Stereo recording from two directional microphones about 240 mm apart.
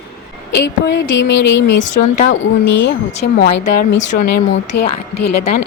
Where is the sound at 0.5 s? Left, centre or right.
Left.